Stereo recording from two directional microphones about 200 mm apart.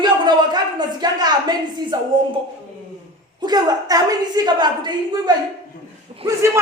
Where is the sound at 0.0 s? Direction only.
20° right (ahead or behind).